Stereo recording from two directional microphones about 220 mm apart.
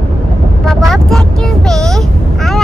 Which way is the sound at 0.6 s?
Centre (ahead or behind).